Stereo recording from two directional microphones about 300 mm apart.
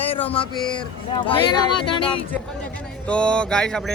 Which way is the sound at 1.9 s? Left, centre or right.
Centre.